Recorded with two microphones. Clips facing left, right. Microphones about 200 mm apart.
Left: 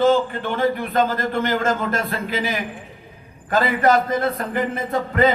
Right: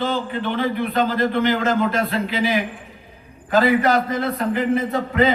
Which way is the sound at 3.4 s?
50° left (ahead or behind).